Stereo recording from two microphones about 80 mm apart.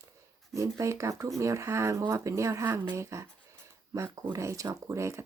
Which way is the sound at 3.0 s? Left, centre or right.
Right.